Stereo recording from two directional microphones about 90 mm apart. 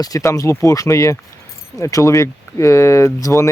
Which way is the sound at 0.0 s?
40° left (ahead or behind).